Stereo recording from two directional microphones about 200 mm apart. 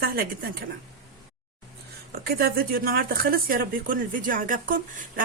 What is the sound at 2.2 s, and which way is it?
Speech, 50° right (ahead or behind).